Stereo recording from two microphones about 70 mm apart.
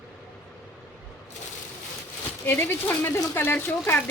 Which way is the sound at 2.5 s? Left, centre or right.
Left.